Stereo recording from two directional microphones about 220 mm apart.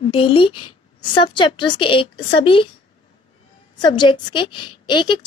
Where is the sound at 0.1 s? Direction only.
25° left (ahead or behind).